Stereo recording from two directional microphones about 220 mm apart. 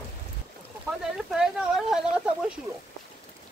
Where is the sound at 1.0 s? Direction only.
Centre (ahead or behind).